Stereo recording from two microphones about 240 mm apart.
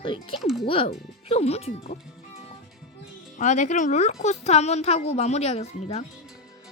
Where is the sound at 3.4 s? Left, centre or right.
Left.